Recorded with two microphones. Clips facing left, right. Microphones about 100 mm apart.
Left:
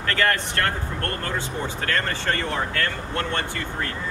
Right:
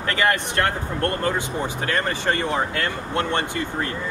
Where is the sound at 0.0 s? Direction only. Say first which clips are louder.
Right 1 dB; 15° right (ahead or behind).